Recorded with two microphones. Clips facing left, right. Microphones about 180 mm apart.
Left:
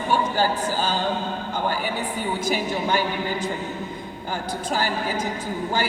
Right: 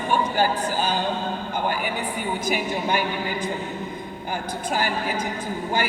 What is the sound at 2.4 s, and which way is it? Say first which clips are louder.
Speech: even; 15° right (ahead or behind).